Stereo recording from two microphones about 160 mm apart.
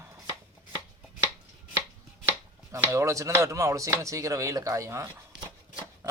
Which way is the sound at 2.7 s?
15° right (ahead or behind).